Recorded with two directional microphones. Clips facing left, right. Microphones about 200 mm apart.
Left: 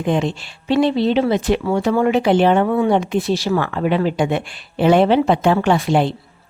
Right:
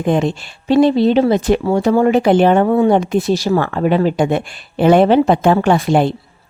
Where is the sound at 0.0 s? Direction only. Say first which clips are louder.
Right 3 dB; 45° right (ahead or behind).